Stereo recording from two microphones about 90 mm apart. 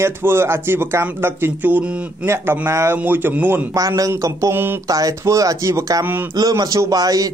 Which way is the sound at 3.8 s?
40° right (ahead or behind).